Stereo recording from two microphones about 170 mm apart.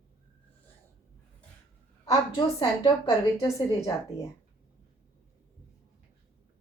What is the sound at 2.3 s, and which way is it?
Speech, 30° left (ahead or behind).